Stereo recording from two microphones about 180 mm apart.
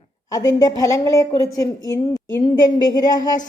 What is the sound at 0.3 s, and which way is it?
Speech, 20° left (ahead or behind).